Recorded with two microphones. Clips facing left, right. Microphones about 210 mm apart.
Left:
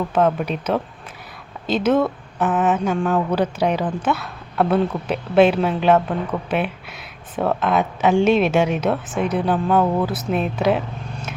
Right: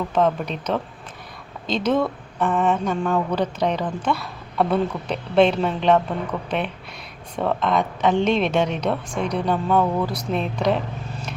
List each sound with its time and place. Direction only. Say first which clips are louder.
0.1 s a woman's voice: left 1 dB; 5° left (ahead or behind)